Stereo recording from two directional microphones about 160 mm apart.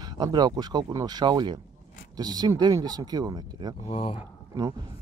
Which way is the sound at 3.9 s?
35° left (ahead or behind).